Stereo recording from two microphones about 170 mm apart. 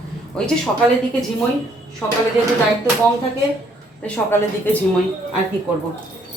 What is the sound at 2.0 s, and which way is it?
Speech, 10° left (ahead or behind).